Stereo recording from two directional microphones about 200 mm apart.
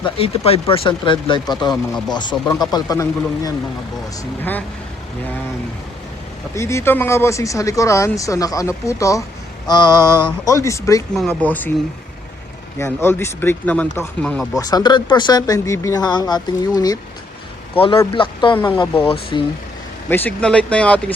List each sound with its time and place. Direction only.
0.0 s speech: 30° left (ahead or behind); by 4.6 s 10° left (ahead or behind)
6.6 s speech: 15° left (ahead or behind)
11.1 s speech: 5° left (ahead or behind)
12.8 s speech: 10° left (ahead or behind)
14.6 s speech: 20° left (ahead or behind)
20.1 s speech: 10° left (ahead or behind)